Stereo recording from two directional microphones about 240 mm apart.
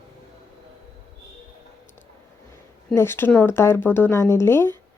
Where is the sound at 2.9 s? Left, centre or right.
Centre.